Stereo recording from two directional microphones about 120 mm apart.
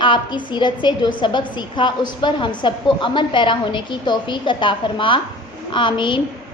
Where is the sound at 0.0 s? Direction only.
40° left (ahead or behind).